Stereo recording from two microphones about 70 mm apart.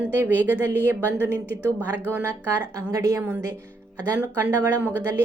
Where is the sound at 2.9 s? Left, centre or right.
Right.